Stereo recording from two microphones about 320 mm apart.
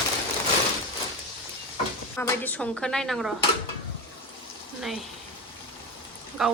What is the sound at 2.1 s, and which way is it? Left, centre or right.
A woman's voice, centre.